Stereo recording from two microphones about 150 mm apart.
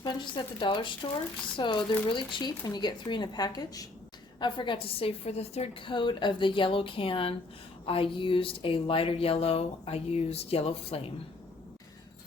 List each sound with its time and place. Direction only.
0.0 s speech: 30° left (ahead or behind)